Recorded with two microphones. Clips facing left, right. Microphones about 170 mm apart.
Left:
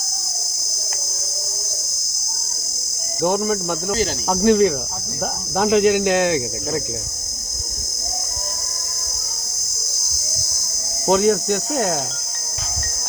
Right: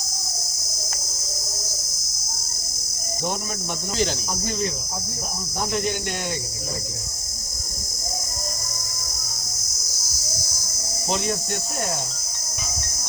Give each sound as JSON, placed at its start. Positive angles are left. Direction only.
{"t": 3.2, "sound": "cricket", "side_deg": 55}
{"t": 4.3, "sound": "speech", "side_deg": 90}
{"t": 11.0, "sound": "speech", "side_deg": 45}
{"t": 11.3, "sound": "cricket", "side_deg": 75}